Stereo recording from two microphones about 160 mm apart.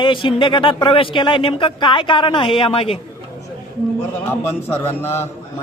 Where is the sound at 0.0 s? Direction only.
30° left (ahead or behind).